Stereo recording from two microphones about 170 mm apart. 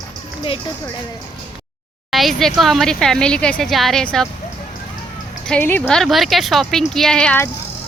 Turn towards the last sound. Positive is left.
turn(degrees=5)  # may be behind; listen again after turning